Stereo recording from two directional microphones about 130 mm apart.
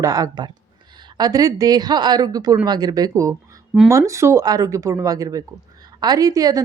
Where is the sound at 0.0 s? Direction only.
30° right (ahead or behind).